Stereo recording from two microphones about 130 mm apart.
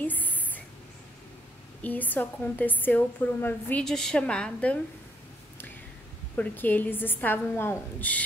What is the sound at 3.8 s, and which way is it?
Speech, 5° left (ahead or behind).